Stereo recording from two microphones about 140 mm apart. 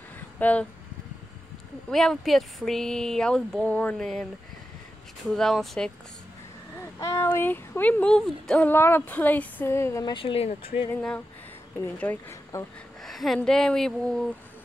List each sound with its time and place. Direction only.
0.4 s speech: 10° left (ahead or behind)
1.9 s speech: centre (ahead or behind)
5.3 s speech: centre (ahead or behind)
6.8 s a sound: 20° left (ahead or behind)
7.2 s speech: 15° left (ahead or behind)
10.1 s speech: 40° left (ahead or behind)
11.0 s speech: 5° left (ahead or behind)
13.0 s speech: centre (ahead or behind)